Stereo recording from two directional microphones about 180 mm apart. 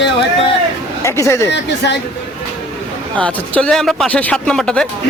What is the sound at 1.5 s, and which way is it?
Speech, 75° left (ahead or behind).